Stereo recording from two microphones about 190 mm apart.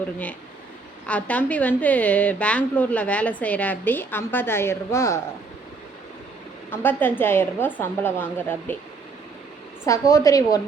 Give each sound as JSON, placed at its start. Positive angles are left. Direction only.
{"t": 1.0, "sound": "a woman's voice", "side_deg": 5}
{"t": 6.7, "sound": "a woman's voice", "side_deg": 10}
{"t": 9.8, "sound": "a woman's voice", "side_deg": 15}